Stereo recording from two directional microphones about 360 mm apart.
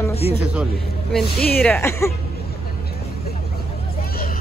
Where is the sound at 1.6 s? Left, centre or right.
Centre.